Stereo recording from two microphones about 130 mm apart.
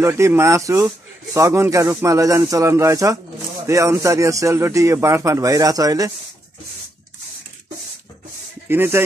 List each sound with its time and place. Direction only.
0.0 s speech: 20° right (ahead or behind)
8.6 s speech: 15° right (ahead or behind)